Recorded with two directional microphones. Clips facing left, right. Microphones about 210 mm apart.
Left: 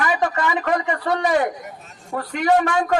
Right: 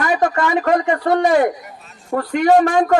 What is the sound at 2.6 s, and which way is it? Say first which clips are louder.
Speech: right 5 dB; 45° right (ahead or behind).